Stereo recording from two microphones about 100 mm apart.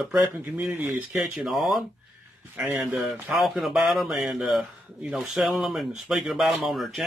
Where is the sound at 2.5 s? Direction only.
15° right (ahead or behind).